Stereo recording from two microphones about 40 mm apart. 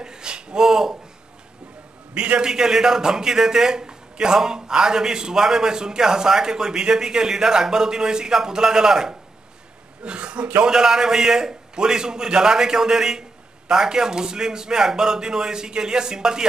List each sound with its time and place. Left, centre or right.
0.0 s a sound: centre
2.1 s a man's voice: right
10.0 s speech: right
10.6 s a man's voice: centre